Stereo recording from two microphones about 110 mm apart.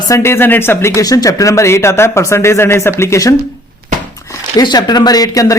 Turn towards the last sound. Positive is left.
turn(degrees=35)  # may be behind; listen again after turning